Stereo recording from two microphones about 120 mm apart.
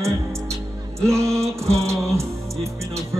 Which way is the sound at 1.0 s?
25° right (ahead or behind).